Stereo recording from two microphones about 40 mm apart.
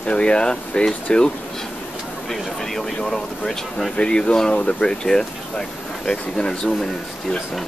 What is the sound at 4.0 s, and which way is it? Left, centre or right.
Speech, left.